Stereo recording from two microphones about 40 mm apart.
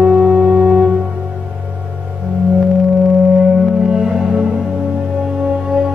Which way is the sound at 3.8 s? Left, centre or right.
Right.